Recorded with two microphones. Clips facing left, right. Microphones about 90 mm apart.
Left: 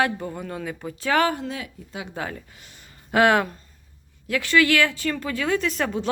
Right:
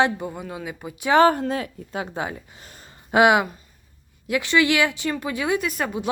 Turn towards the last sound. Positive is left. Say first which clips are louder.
# left 1 dB
turn(degrees=-10)  # may be behind; listen again after turning